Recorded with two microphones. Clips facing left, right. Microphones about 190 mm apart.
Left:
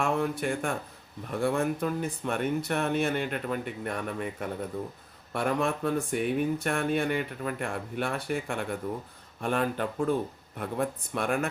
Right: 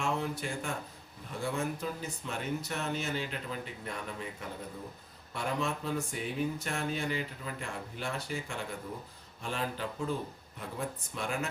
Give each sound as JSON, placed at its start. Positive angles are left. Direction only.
{"t": 0.0, "sound": "speech", "side_deg": 55}